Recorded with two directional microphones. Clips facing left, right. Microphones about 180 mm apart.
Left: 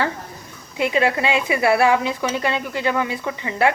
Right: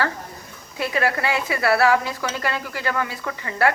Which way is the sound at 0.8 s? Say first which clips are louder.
Left 4 dB; 20° left (ahead or behind).